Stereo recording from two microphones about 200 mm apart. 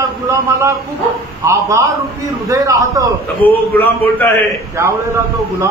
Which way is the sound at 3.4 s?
10° left (ahead or behind).